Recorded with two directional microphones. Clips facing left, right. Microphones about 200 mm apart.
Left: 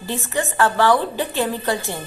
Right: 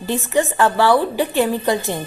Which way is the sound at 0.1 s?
15° right (ahead or behind).